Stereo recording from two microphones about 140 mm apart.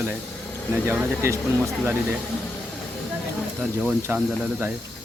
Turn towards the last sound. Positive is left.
turn(degrees=-10)  # may be behind; listen again after turning